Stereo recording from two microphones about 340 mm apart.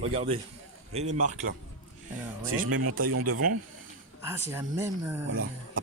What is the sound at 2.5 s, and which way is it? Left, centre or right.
Speech, right.